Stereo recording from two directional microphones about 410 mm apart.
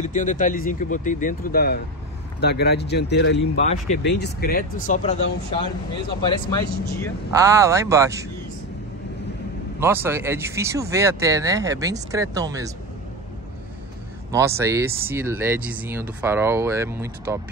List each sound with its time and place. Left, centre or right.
0.0 s speech: centre
7.3 s speech: centre
9.8 s speech: centre
14.3 s speech: centre